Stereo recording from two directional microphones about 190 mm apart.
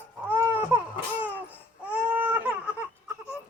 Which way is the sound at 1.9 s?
5° right (ahead or behind).